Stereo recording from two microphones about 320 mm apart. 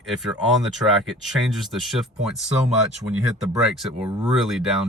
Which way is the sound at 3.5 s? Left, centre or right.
Centre.